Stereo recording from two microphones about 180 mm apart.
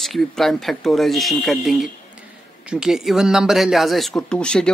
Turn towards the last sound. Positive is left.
turn(degrees=5)  # may be behind; listen again after turning